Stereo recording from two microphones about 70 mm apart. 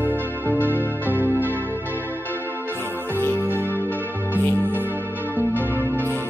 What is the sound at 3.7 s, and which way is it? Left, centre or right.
Music, left.